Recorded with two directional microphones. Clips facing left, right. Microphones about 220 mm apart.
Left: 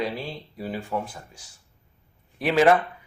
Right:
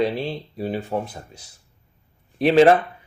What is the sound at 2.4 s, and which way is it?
Speech, 25° right (ahead or behind).